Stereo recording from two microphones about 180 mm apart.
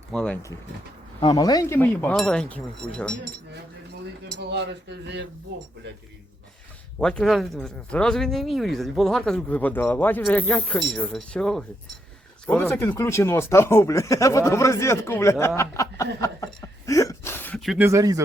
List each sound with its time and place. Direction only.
0.1 s speech: 5° left (ahead or behind)
1.2 s speech: 20° left (ahead or behind); by 3.2 s 5° left (ahead or behind)
4.4 s speech: 70° right (ahead or behind)
7.0 s speech: 5° left (ahead or behind)
16.8 s gasp: 15° left (ahead or behind); by 17.8 s centre (ahead or behind)
17.8 s speech: 20° right (ahead or behind)